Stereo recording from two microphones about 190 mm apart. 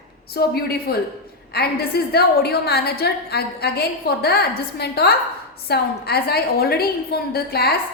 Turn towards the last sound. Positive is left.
turn(degrees=55)  # may be behind; listen again after turning